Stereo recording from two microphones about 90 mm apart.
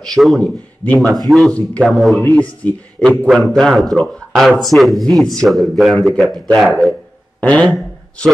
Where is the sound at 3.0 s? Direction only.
10° left (ahead or behind).